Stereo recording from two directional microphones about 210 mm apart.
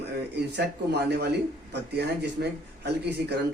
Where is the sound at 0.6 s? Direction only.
50° right (ahead or behind).